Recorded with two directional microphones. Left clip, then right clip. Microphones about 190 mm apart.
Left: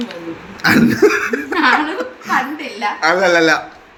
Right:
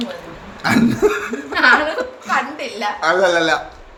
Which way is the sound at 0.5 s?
15° left (ahead or behind).